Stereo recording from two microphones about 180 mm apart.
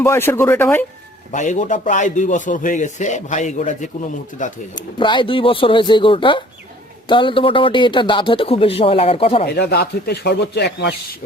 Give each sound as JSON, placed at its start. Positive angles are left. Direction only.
{"t": 0.0, "sound": "speech", "side_deg": 15}
{"t": 1.3, "sound": "speech", "side_deg": 45}
{"t": 4.9, "sound": "speech", "side_deg": 30}
{"t": 9.6, "sound": "speech", "side_deg": 65}